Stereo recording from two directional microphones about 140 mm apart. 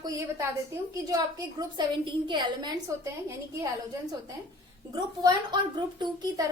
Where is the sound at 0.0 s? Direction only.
25° right (ahead or behind).